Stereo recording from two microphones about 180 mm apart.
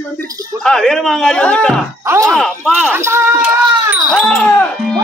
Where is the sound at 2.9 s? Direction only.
15° right (ahead or behind).